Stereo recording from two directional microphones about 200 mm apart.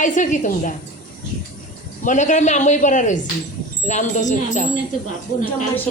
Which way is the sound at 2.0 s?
40° left (ahead or behind).